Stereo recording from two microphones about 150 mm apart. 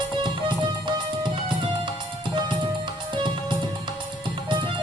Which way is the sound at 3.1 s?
30° right (ahead or behind).